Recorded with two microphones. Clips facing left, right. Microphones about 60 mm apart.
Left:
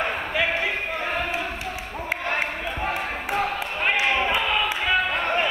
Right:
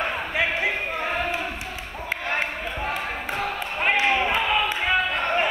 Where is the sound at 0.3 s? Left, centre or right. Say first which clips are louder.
Even; right.